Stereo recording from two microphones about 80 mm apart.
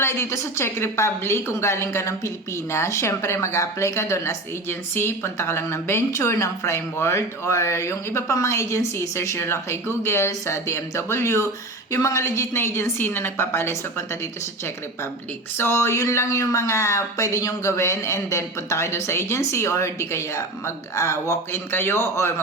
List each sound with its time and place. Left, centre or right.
0.0 s a woman's voice: left
15.5 s a woman's voice: left